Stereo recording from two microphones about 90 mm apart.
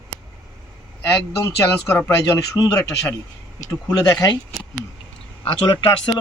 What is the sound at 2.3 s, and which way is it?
Speech, 40° left (ahead or behind).